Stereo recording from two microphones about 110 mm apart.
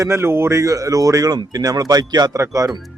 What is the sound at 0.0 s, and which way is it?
A man's voice, 25° right (ahead or behind).